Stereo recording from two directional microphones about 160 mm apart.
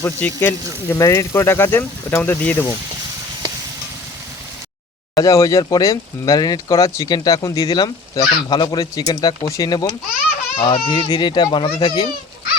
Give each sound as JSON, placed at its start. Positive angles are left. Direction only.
{"t": 0.0, "sound": "speech", "side_deg": 10}
{"t": 5.1, "sound": "speech", "side_deg": 20}